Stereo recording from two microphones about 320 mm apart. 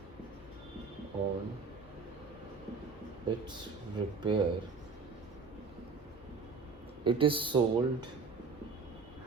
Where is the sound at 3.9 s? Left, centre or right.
Centre.